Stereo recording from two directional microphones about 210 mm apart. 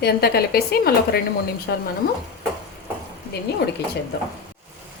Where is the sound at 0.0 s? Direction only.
50° left (ahead or behind).